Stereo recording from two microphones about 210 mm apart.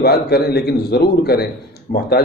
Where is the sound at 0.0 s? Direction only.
50° left (ahead or behind).